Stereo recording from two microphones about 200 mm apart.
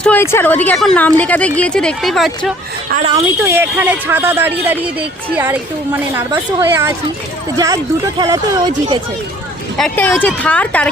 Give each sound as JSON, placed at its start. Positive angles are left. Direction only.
{"t": 0.0, "sound": "a woman's voice", "side_deg": 10}
{"t": 3.1, "sound": "speech", "side_deg": -15}
{"t": 9.7, "sound": "a woman's voice", "side_deg": 5}